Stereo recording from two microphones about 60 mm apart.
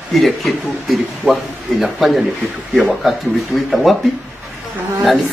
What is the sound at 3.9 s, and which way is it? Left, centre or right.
Speech, centre.